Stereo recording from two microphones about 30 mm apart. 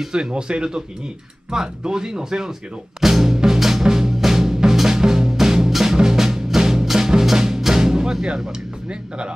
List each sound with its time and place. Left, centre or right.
0.1 s speech: right
3.0 s music: centre
3.4 s drum: centre
3.8 s music: right